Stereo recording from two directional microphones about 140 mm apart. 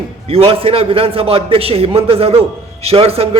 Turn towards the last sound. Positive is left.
turn(degrees=-45)  # may be behind; listen again after turning